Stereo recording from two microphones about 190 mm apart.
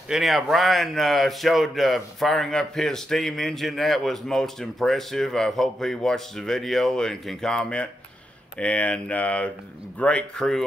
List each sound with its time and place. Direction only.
0.1 s speech: centre (ahead or behind)